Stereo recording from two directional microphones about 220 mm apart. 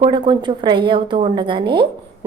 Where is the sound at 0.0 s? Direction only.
20° right (ahead or behind).